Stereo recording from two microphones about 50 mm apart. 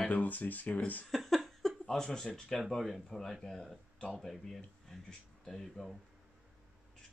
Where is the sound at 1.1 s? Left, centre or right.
Centre.